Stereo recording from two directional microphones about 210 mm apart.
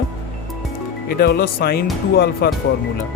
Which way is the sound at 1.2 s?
45° left (ahead or behind).